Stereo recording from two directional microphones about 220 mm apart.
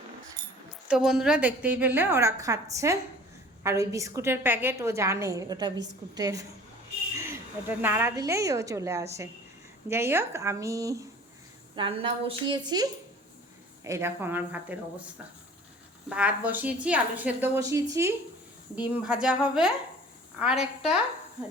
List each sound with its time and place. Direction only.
0.9 s a woman's voice: 5° right (ahead or behind)
16.0 s a woman's voice: 5° right (ahead or behind)